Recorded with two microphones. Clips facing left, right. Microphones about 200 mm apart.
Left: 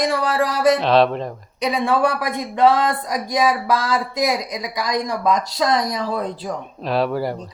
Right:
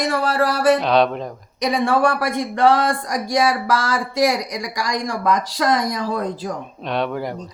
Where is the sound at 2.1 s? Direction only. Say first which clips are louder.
Right 2 dB; 80° right.